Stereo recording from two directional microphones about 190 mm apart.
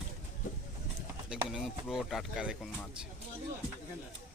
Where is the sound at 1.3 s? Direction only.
Centre (ahead or behind).